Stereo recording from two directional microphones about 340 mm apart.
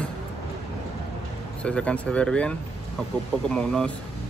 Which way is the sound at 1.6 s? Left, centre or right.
Centre.